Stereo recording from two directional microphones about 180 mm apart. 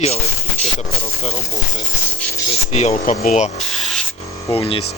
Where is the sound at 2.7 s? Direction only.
35° left (ahead or behind).